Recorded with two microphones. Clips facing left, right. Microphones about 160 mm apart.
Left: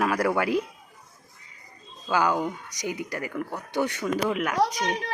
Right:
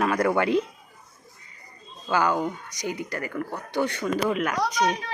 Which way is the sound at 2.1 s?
10° left (ahead or behind).